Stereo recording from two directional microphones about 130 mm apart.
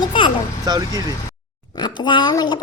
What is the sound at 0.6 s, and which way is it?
Speech, 25° right (ahead or behind).